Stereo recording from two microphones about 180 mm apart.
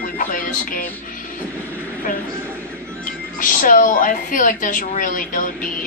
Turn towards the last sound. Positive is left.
turn(degrees=45)  # may be behind; listen again after turning